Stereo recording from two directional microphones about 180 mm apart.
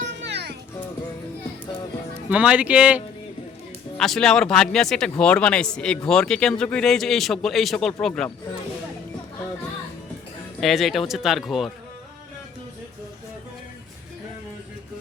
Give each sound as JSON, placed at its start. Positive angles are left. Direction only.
{"t": 0.2, "sound": "music", "side_deg": -70}
{"t": 2.3, "sound": "speech", "side_deg": -5}
{"t": 10.6, "sound": "speech", "side_deg": 0}